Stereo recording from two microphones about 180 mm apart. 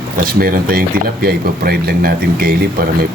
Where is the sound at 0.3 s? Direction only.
55° right (ahead or behind).